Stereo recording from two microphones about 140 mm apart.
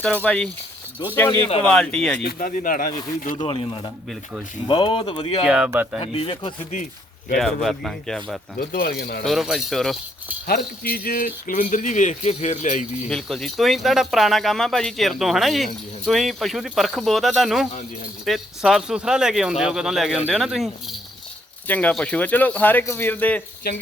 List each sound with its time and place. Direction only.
0.0 s speech: 10° left (ahead or behind)
2.2 s speech: 80° left
3.3 s speech: 35° left (ahead or behind)
5.5 s speech: 10° right (ahead or behind)
6.0 s speech: 40° left (ahead or behind)
7.3 s speech: centre (ahead or behind)
8.5 s speech: 90° left
9.2 s speech: centre (ahead or behind)
10.4 s speech: 90° left; by 13.1 s 60° left (ahead or behind)
13.1 s speech: 5° left (ahead or behind)
21.7 s speech: 10° left (ahead or behind)